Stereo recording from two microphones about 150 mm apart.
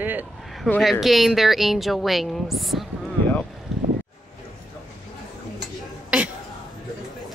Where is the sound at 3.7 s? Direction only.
Centre (ahead or behind).